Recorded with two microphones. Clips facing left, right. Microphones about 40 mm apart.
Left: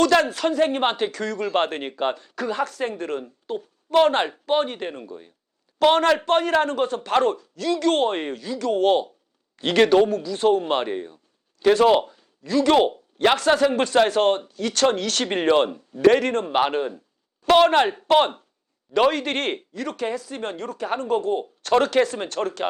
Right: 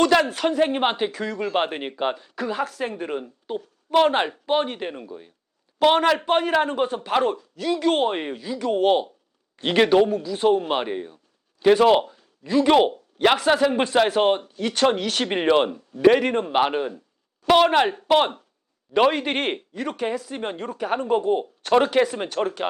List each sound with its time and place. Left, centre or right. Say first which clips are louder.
0.0 s a man's voice: even; centre
11.6 s a sound: right 1 dB; centre
12.5 s a man's voice: right 1 dB; centre
18.9 s a man's voice: even; centre